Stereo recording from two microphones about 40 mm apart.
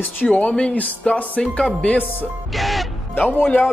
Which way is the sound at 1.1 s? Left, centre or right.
Centre.